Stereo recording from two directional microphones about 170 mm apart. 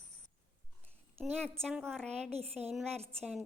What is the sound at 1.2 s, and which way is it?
A woman's voice, 5° left (ahead or behind).